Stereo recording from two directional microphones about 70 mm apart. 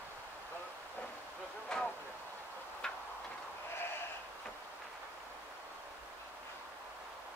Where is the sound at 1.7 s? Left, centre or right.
Centre.